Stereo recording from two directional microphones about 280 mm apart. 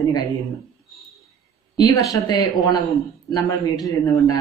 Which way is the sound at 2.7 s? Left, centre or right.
Centre.